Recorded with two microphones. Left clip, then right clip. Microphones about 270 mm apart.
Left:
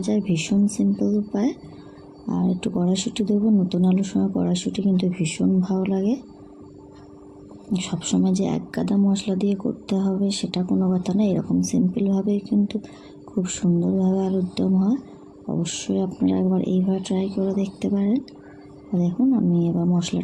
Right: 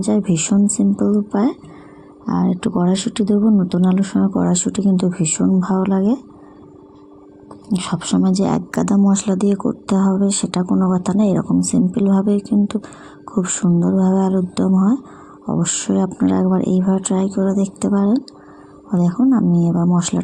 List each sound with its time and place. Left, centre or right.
0.0 s speech: centre
7.8 s speech: centre
19.3 s speech: centre